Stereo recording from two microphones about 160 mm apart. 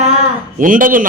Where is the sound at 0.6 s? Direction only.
55° right (ahead or behind).